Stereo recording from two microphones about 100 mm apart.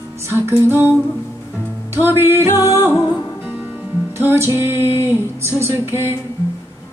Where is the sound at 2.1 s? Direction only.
25° right (ahead or behind).